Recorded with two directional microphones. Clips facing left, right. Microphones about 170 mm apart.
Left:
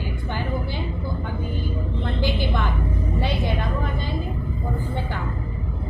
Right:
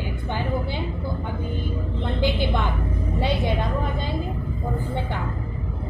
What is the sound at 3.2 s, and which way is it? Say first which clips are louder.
Speech: right 3 dB; 20° right (ahead or behind).